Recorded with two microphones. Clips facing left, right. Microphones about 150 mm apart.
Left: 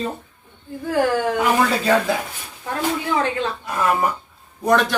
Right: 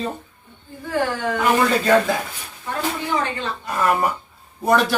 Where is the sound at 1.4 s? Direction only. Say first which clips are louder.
Even; 5° left (ahead or behind).